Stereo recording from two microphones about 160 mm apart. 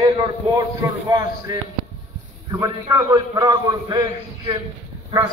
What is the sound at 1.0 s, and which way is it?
A man's voice, 20° right (ahead or behind).